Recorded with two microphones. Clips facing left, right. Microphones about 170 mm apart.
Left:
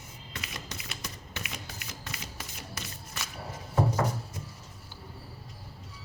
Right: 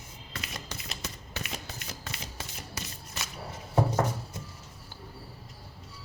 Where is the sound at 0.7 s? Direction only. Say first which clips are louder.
Right 1 dB; 30° right (ahead or behind).